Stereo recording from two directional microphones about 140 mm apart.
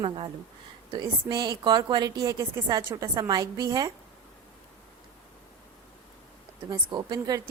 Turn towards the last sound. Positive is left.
turn(degrees=-30)  # may be behind; listen again after turning